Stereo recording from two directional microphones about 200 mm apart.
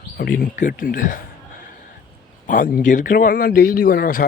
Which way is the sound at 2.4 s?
45° left (ahead or behind).